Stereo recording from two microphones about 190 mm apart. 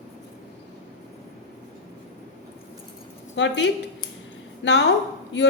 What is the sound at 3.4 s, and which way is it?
A woman's voice, 65° left (ahead or behind).